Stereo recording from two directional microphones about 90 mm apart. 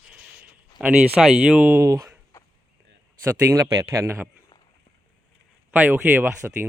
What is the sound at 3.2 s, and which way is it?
Speech, 35° right (ahead or behind).